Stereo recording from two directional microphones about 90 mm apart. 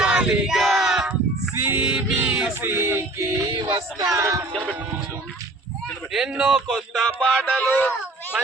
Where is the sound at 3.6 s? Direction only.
45° right (ahead or behind).